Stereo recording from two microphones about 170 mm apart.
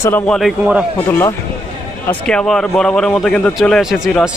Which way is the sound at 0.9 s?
15° left (ahead or behind).